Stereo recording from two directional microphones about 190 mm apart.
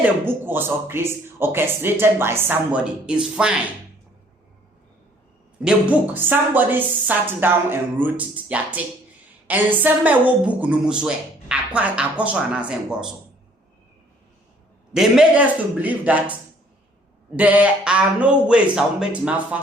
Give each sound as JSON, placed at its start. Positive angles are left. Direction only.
{"t": 0.0, "sound": "a woman's voice", "side_deg": -10}
{"t": 5.9, "sound": "a woman's voice", "side_deg": -10}
{"t": 14.9, "sound": "a woman's voice", "side_deg": -5}
{"t": 17.3, "sound": "a woman's voice", "side_deg": -10}